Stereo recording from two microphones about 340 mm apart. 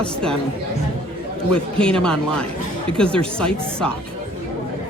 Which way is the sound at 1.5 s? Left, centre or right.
Centre.